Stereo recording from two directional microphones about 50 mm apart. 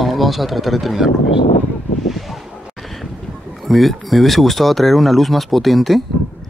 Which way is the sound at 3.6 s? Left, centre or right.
Centre.